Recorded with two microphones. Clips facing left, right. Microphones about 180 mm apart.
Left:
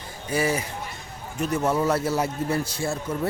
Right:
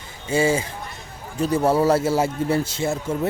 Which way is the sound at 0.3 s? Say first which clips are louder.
Right 5 dB; 25° right (ahead or behind).